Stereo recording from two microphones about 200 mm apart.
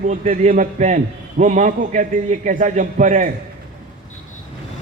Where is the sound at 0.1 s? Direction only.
40° right (ahead or behind).